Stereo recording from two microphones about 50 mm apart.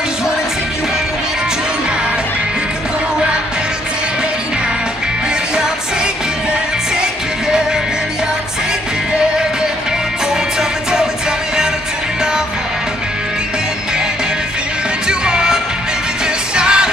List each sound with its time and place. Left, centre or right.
10.6 s music: centre
15.0 s music: centre